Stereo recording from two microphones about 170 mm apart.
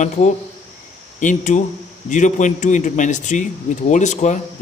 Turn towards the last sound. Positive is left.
turn(degrees=45)  # may be behind; listen again after turning